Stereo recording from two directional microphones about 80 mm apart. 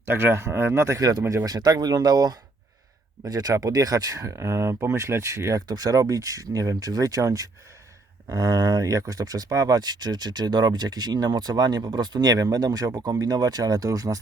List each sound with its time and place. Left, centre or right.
0.0 s speech: right
1.5 s speech: right